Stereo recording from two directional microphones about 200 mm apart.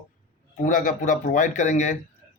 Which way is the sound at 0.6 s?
40° left (ahead or behind).